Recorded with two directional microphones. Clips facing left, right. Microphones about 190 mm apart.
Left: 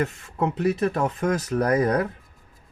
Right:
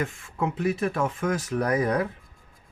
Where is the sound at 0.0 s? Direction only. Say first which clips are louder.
Left 3 dB; 40° left (ahead or behind).